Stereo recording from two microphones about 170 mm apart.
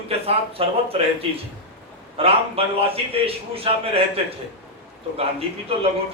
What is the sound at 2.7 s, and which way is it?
A man's voice, 35° right (ahead or behind).